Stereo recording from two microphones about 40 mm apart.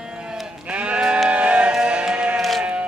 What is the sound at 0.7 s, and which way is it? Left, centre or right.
Sheep, right.